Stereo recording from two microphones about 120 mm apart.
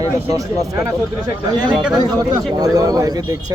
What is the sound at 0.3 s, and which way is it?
Speech, 30° right (ahead or behind).